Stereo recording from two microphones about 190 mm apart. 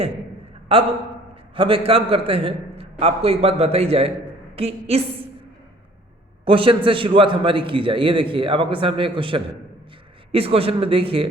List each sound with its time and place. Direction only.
0.7 s a man's voice: 30° right (ahead or behind)
6.4 s a man's voice: 30° right (ahead or behind)